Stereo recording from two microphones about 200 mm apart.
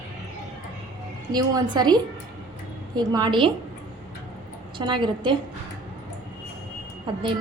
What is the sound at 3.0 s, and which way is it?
Speech, 20° right (ahead or behind).